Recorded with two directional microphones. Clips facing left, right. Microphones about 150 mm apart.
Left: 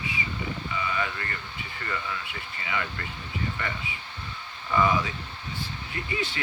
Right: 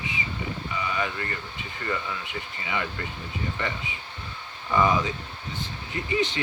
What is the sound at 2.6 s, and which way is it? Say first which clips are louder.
Speech: right 1 dB; 20° right (ahead or behind).